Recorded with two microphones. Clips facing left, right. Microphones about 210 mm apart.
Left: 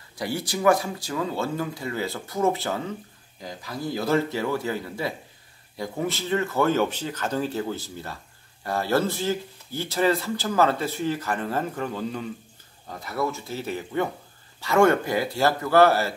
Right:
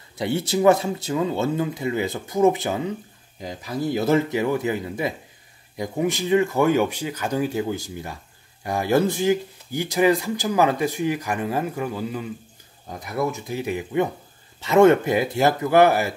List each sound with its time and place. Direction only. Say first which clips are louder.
0.2 s speech: right 5 dB; 25° right (ahead or behind); by 12.3 s 5° right (ahead or behind)
12.8 s speech: right 3 dB; 15° right (ahead or behind)